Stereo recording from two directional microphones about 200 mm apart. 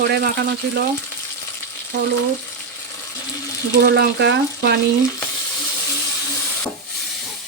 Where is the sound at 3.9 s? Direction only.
55° right (ahead or behind).